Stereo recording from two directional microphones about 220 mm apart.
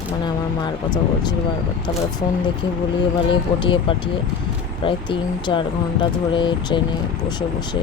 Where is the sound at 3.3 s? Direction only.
20° left (ahead or behind).